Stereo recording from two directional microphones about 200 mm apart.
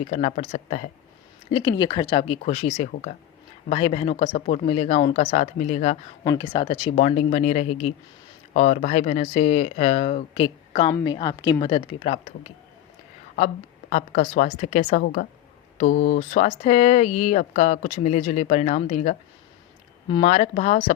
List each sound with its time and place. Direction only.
0.0 s speech: 35° left (ahead or behind)
1.5 s speech: 25° left (ahead or behind)
6.2 s speech: 25° left (ahead or behind)
13.9 s speech: 35° left (ahead or behind)